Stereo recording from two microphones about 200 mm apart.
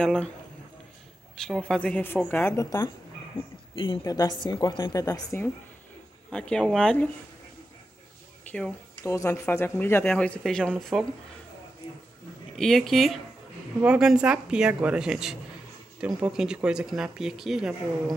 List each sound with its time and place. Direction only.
0.0 s speech: 5° left (ahead or behind)
1.3 s a woman's voice: 5° left (ahead or behind)
8.5 s speech: 5° left (ahead or behind)
12.5 s speech: centre (ahead or behind)